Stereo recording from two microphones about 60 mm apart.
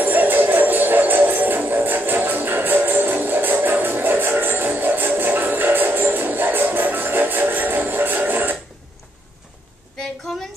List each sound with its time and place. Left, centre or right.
0.0 s music: right